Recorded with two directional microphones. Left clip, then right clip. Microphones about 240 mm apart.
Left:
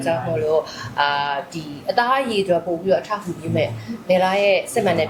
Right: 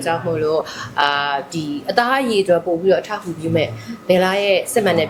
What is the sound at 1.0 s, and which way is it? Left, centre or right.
A woman's voice, right.